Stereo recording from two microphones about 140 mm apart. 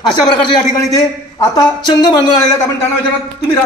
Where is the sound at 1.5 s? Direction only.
30° left (ahead or behind).